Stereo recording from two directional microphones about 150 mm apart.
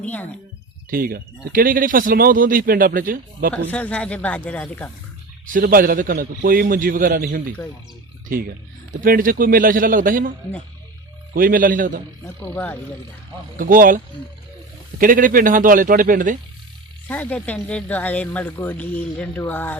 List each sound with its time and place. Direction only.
0.0 s speech: 10° left (ahead or behind)
0.9 s speech: 80° right
3.5 s speech: 10° left (ahead or behind)
5.5 s speech: 70° right (ahead or behind)
8.9 s speech: 65° right (ahead or behind)
11.3 s speech: 65° right (ahead or behind)
12.2 s speech: 15° left (ahead or behind)
13.6 s speech: 65° right (ahead or behind)
17.1 s speech: 10° left (ahead or behind)